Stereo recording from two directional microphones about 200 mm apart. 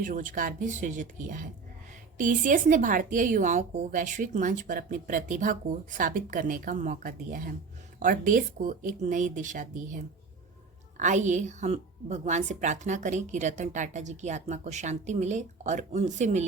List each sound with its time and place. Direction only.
0.0 s a woman's voice: 40° right (ahead or behind)